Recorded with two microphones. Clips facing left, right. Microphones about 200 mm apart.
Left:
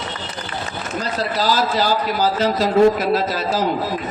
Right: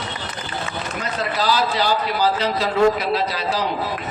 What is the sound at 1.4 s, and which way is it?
Speech, 45° left (ahead or behind).